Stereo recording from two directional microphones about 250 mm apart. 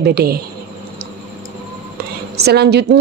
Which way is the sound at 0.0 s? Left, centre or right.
Right.